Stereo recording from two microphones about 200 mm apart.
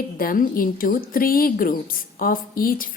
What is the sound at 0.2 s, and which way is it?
A woman's voice, 45° left (ahead or behind).